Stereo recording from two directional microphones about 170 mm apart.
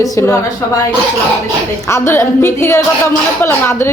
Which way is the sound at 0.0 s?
20° left (ahead or behind).